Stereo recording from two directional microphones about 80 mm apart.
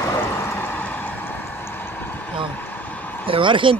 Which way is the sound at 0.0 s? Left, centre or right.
Left.